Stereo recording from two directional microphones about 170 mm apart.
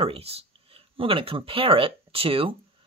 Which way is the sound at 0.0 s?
35° right (ahead or behind).